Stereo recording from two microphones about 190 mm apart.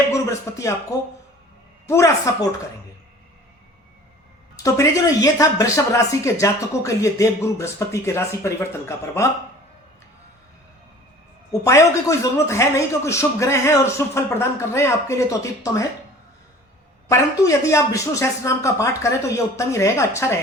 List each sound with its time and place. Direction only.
0.1 s speech: 15° left (ahead or behind)
1.9 s a man's voice: 15° left (ahead or behind)
4.5 s a man's voice: 15° left (ahead or behind)
11.6 s a man's voice: 15° left (ahead or behind)
17.1 s a man's voice: 15° left (ahead or behind)